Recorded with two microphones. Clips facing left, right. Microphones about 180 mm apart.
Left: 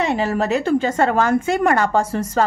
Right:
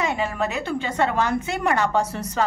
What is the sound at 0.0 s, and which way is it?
A woman's voice, 35° left (ahead or behind).